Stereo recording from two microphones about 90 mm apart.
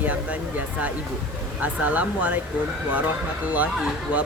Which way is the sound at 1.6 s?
15° right (ahead or behind).